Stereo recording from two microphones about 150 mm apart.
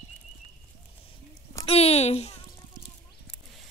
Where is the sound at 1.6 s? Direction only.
45° left (ahead or behind).